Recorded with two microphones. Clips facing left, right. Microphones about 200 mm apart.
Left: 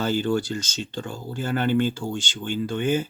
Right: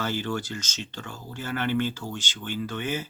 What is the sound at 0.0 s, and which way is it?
Speech, 30° left (ahead or behind).